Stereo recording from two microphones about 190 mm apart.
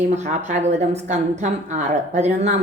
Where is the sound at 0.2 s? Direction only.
40° right (ahead or behind).